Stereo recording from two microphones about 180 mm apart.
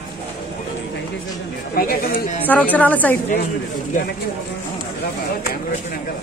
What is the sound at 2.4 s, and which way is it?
Speech, 10° left (ahead or behind).